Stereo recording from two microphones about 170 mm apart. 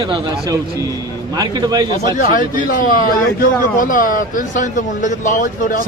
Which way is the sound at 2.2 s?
55° left (ahead or behind).